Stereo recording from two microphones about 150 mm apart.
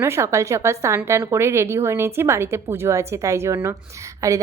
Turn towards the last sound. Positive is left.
turn(degrees=-20)  # may be behind; listen again after turning